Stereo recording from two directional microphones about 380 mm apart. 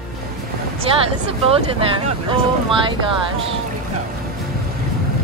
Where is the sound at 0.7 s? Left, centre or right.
Centre.